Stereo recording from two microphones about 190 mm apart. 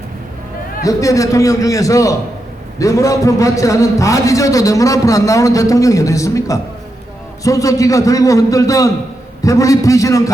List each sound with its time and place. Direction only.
0.8 s a man's voice: 15° left (ahead or behind)